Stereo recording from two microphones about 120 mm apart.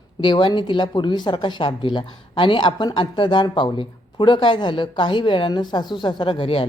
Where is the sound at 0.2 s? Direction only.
40° left (ahead or behind).